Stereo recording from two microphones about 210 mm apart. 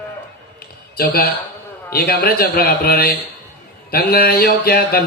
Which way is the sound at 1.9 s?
45° left (ahead or behind).